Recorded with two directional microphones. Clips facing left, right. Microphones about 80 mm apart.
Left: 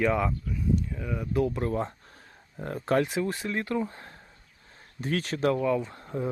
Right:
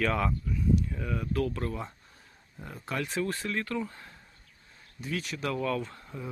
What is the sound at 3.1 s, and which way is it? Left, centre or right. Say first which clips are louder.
Speech: left 2 dB; centre.